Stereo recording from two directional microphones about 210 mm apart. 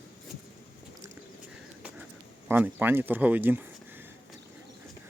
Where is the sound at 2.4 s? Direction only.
10° right (ahead or behind).